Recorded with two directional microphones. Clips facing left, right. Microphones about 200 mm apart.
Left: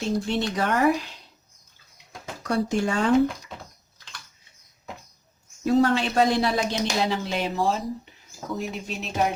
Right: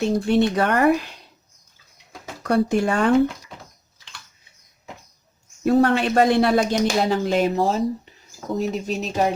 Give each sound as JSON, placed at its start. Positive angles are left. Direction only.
{"t": 0.0, "sound": "speech", "side_deg": -60}
{"t": 2.4, "sound": "speech", "side_deg": -60}
{"t": 5.6, "sound": "speech", "side_deg": -60}